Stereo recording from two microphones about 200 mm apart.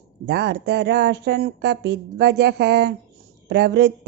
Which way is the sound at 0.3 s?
55° right (ahead or behind).